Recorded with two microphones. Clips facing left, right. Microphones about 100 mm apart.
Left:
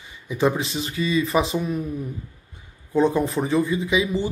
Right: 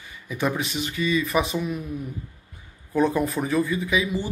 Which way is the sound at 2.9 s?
25° left (ahead or behind).